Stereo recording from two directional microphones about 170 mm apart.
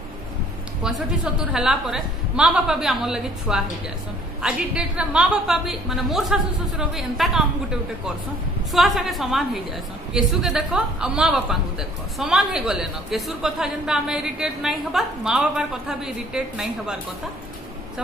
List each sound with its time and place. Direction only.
0.8 s a woman's voice: 5° right (ahead or behind)
8.7 s a woman's voice: centre (ahead or behind)